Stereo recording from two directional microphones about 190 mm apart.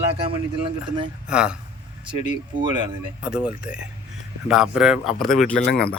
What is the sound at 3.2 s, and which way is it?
Speech, 5° right (ahead or behind).